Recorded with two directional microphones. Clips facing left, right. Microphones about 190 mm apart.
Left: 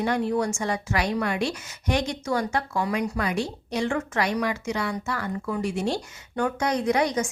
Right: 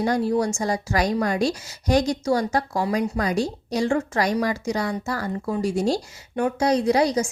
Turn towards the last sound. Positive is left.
turn(degrees=-35)  # may be behind; listen again after turning